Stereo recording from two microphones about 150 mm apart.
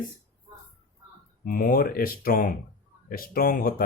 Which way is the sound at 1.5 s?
75° left (ahead or behind).